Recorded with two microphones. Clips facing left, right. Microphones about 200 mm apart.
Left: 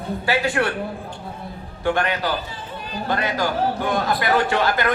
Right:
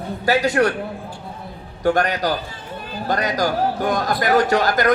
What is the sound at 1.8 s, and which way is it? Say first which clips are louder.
A man's voice: right 3 dB; 40° right (ahead or behind).